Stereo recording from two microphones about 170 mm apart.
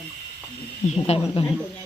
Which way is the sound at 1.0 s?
35° left (ahead or behind).